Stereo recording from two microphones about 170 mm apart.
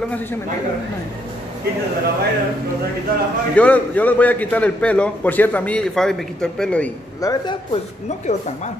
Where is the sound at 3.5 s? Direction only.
10° left (ahead or behind).